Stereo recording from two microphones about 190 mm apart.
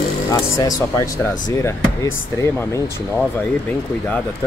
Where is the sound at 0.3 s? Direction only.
20° left (ahead or behind).